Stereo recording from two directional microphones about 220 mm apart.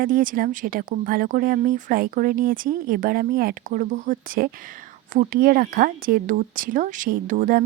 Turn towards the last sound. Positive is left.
turn(degrees=-40)  # may be behind; listen again after turning